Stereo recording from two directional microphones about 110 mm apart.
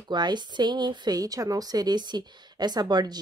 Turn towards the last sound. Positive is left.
turn(degrees=-40)  # may be behind; listen again after turning